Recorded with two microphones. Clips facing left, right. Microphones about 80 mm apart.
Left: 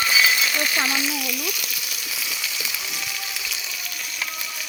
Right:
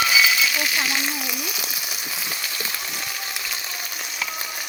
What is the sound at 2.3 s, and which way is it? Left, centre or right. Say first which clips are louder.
Frying: right 1 dB; right.